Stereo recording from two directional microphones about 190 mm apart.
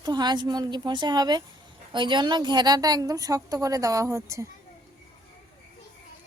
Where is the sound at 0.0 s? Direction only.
20° right (ahead or behind).